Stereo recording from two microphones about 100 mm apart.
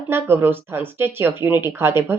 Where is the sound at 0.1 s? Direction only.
25° right (ahead or behind).